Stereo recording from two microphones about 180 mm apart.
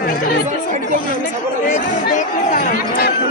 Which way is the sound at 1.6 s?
45° left (ahead or behind).